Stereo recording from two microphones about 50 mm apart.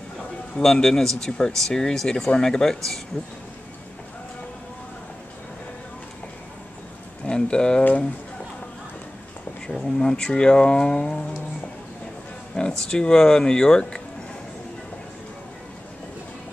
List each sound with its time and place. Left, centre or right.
0.6 s speech: centre
7.2 s speech: centre
9.8 s speech: centre
12.5 s speech: centre